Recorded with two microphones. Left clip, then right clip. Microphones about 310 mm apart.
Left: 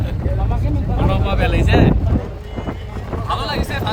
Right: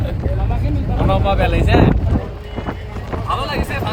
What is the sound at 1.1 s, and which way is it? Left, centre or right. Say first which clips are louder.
Vehicle: right 5 dB; centre.